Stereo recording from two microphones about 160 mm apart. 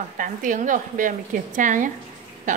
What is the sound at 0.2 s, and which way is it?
A woman's voice, 55° right (ahead or behind).